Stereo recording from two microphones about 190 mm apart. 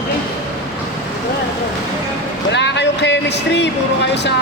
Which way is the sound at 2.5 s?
65° left (ahead or behind).